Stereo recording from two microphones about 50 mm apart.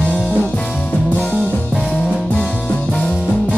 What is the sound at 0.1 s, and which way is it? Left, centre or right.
Music, left.